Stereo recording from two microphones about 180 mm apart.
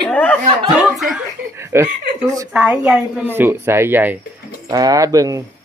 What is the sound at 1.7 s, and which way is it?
A woman's voice, 15° right (ahead or behind).